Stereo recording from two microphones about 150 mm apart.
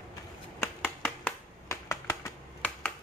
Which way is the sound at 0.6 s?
10° left (ahead or behind).